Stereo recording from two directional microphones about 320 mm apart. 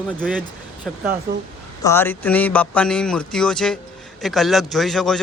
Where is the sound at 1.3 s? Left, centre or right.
Right.